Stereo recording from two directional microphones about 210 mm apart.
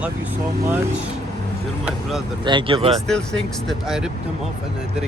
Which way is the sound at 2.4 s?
25° right (ahead or behind).